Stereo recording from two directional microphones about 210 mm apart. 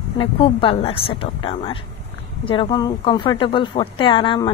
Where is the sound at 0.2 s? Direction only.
25° left (ahead or behind).